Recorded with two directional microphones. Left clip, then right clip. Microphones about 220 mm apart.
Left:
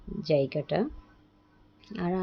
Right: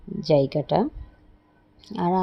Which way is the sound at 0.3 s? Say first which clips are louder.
Right 6 dB; 20° right (ahead or behind).